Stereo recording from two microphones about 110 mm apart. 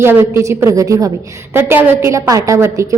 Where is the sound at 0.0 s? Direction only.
20° right (ahead or behind).